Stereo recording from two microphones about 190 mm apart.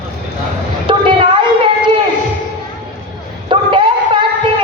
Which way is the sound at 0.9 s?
25° right (ahead or behind).